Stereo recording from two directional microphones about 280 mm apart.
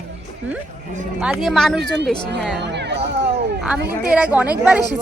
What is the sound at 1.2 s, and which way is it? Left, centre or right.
Speech, centre.